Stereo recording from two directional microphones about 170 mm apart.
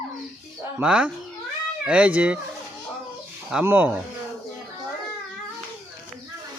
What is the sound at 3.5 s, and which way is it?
Speech, 10° right (ahead or behind).